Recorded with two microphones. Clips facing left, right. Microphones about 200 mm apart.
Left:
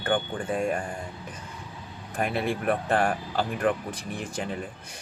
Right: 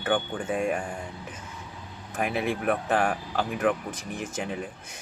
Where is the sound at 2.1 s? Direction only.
5° right (ahead or behind).